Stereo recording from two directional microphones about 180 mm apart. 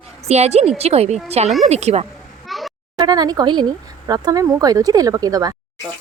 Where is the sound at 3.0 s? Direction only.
25° right (ahead or behind).